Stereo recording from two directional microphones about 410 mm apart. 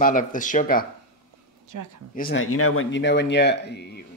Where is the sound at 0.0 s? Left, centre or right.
Centre.